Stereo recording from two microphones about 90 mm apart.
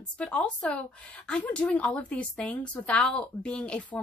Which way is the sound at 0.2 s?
15° left (ahead or behind).